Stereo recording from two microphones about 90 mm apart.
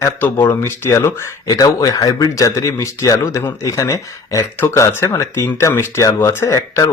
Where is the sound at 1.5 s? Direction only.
45° left (ahead or behind).